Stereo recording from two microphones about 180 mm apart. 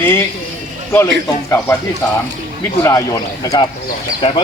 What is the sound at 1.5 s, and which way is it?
Speech, 15° left (ahead or behind).